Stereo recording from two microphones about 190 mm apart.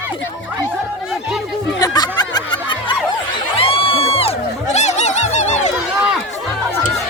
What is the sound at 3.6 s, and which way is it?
Snicker, 30° left (ahead or behind).